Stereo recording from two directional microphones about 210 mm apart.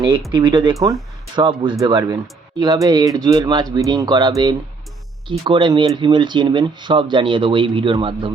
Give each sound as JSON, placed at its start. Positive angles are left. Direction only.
{"t": 0.3, "sound": "speech", "side_deg": -20}